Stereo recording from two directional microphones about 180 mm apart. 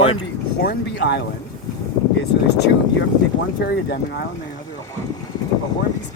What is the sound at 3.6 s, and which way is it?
Speech, 65° left (ahead or behind).